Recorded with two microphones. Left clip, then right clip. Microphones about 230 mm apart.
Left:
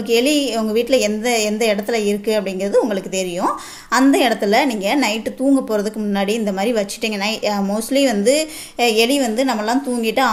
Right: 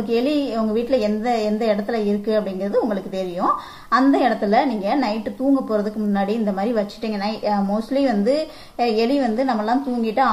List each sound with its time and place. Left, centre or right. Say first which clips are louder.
0.1 s a woman's voice: left 5 dB; left